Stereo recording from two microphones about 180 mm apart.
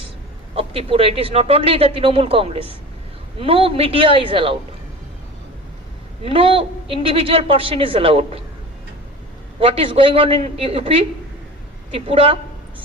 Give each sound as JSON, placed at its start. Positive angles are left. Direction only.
{"t": 0.5, "sound": "a woman's voice", "side_deg": -30}
{"t": 6.2, "sound": "a woman's voice", "side_deg": -30}
{"t": 9.6, "sound": "a woman's voice", "side_deg": -30}